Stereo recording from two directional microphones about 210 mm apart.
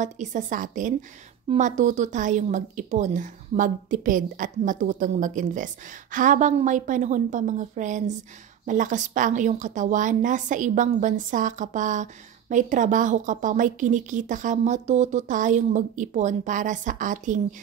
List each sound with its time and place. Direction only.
0.0 s a woman's voice: 35° right (ahead or behind)